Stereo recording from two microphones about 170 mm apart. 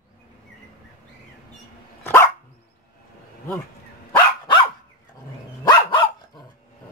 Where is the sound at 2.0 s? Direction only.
15° left (ahead or behind).